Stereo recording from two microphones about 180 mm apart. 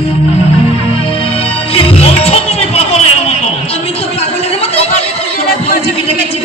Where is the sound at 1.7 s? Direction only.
35° left (ahead or behind).